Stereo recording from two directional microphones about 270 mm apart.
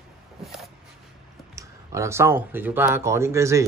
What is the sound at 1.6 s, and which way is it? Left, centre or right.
Speech, centre.